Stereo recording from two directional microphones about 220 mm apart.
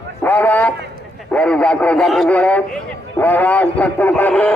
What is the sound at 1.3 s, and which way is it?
A man's voice, 5° left (ahead or behind).